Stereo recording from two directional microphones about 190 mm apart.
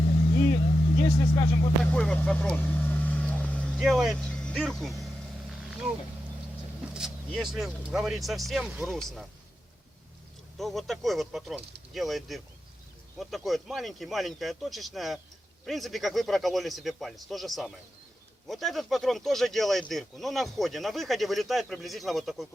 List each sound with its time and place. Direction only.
1.0 s speech: 25° left (ahead or behind)
1.8 s vehicle: 5° left (ahead or behind)
6.8 s vehicle: 5° right (ahead or behind)
7.3 s speech: centre (ahead or behind)
10.6 s speech: centre (ahead or behind)